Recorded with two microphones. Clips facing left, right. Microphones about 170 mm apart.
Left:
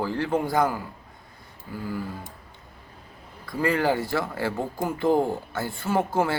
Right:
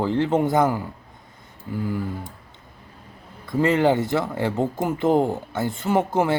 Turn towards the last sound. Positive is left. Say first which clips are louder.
# right 3 dB
turn(degrees=-20)  # may be behind; listen again after turning